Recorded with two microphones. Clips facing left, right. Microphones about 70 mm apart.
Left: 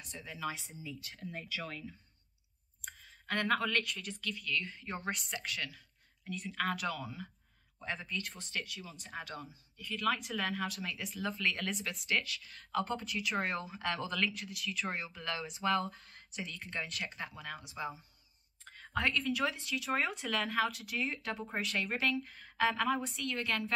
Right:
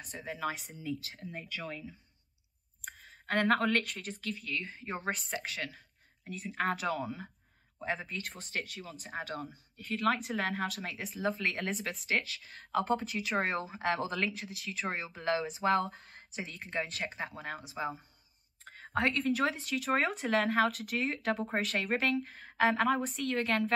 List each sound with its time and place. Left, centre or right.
0.0 s speech: right
1.2 s speech: centre
3.0 s a woman's voice: right
8.5 s speech: right
19.1 s speech: right